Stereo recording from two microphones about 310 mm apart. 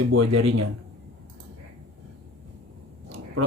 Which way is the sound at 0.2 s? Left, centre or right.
Right.